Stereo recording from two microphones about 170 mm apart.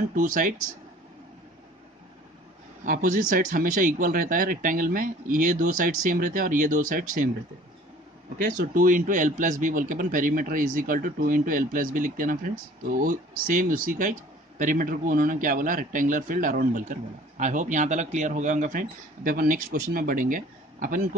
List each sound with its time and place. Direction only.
0.1 s a man's voice: 55° right (ahead or behind)
2.8 s a man's voice: 50° right (ahead or behind)
8.4 s a man's voice: 55° right (ahead or behind)